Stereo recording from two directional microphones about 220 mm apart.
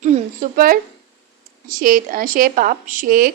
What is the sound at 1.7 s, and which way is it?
A woman's voice, 40° right (ahead or behind).